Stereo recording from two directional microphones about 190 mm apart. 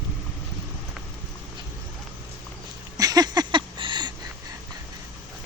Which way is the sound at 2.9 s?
20° right (ahead or behind).